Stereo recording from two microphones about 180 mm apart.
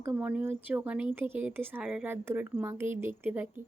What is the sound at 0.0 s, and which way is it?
Speech, 10° right (ahead or behind).